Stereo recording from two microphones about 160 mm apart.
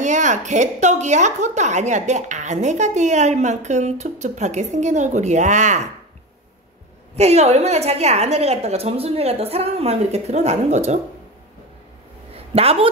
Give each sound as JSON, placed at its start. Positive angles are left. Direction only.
{"t": 0.0, "sound": "a woman's voice", "side_deg": -50}
{"t": 7.2, "sound": "a woman's voice", "side_deg": -45}
{"t": 12.4, "sound": "a sound", "side_deg": -40}